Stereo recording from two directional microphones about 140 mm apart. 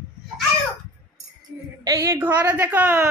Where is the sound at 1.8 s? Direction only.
20° right (ahead or behind).